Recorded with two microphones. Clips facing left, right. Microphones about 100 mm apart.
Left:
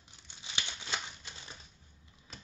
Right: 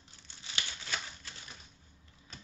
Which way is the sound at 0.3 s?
20° left (ahead or behind).